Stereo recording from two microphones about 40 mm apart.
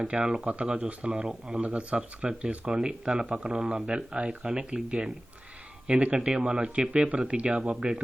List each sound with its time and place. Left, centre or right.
0.0 s speech: right
1.3 s speech: centre
1.6 s speech: right
6.1 s speech: right